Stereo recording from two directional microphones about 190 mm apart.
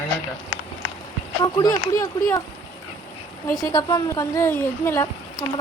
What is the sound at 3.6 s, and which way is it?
Speech, 20° left (ahead or behind).